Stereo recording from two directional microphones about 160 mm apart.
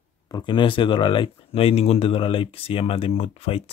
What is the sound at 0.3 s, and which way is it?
Speech, 30° left (ahead or behind).